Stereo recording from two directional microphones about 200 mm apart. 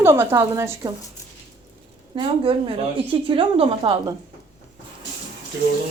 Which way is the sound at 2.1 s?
25° right (ahead or behind).